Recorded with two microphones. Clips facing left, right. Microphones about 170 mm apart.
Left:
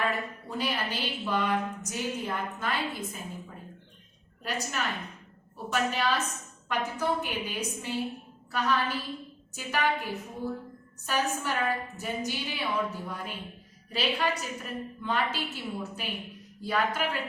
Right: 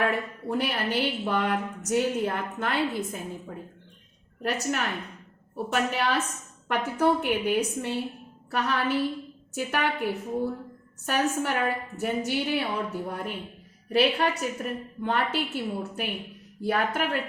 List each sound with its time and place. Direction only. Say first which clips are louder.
0.0 s a woman's voice: right 4 dB; 60° right (ahead or behind)
5.7 s a woman's voice: right 2 dB; 60° right (ahead or behind)